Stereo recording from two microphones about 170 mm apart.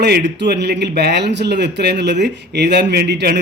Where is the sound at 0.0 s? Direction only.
80° right.